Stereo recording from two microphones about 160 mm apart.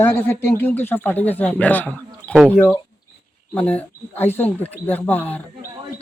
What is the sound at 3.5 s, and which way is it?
Speech, 10° left (ahead or behind).